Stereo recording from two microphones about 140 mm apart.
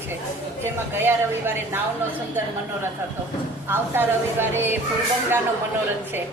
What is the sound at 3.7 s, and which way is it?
A woman's voice, 15° right (ahead or behind).